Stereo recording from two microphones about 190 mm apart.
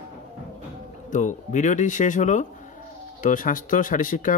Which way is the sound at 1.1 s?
40° left (ahead or behind).